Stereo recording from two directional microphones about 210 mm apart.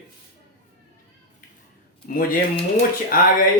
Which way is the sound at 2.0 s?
45° left (ahead or behind).